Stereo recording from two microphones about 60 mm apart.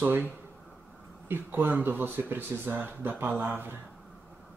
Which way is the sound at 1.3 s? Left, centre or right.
Right.